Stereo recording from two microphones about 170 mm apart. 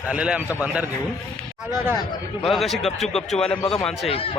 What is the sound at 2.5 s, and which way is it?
A man's voice, centre (ahead or behind).